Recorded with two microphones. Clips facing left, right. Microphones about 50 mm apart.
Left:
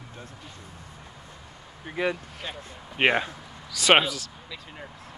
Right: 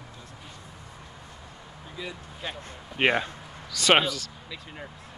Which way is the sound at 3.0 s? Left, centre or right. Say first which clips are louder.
Left 1 dB; centre.